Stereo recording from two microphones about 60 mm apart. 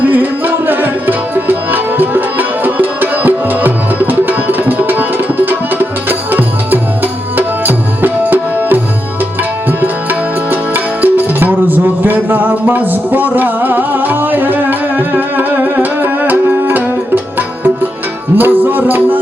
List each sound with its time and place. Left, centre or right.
0.1 s music: right
7.3 s tabla: right
9.8 s music: right
18.3 s music: right